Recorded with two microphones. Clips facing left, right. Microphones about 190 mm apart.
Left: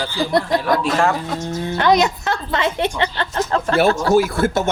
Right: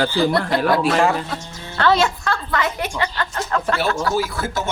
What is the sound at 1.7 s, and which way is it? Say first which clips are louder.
A woman's voice: left 1 dB; 15° left (ahead or behind).